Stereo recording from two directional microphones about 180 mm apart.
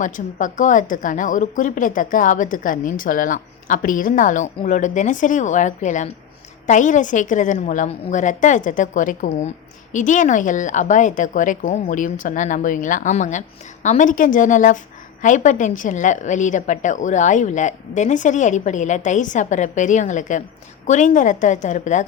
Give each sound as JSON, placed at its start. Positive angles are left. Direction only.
{"t": 0.0, "sound": "speech", "side_deg": 45}